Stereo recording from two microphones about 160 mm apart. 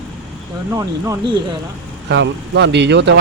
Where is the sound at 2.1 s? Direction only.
90° right.